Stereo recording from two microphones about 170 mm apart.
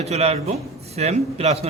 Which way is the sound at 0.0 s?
40° right (ahead or behind).